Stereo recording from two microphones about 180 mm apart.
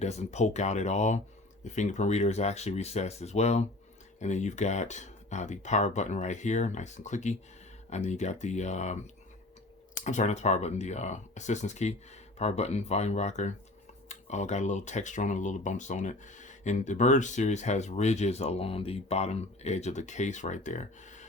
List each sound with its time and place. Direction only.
0.0 s speech: 40° left (ahead or behind)
10.0 s speech: 40° left (ahead or behind)